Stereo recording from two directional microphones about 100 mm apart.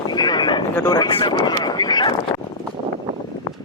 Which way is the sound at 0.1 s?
45° left (ahead or behind).